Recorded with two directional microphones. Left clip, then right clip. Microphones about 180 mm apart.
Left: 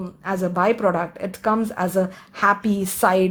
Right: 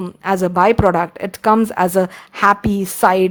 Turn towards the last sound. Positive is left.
turn(degrees=-25)  # may be behind; listen again after turning